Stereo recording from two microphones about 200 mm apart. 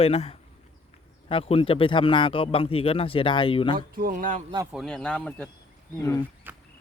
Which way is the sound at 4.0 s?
45° right (ahead or behind).